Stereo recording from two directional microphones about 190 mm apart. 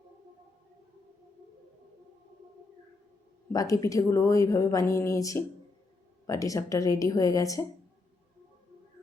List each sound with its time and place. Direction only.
3.5 s speech: 20° left (ahead or behind)